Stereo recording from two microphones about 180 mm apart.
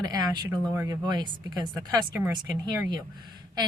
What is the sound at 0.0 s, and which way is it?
A woman's voice, 20° right (ahead or behind).